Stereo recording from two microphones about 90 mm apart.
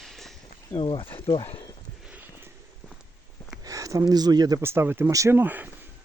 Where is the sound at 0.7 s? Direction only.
65° left (ahead or behind).